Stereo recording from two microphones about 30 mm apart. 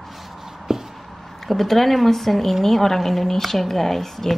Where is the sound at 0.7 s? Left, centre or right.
Centre.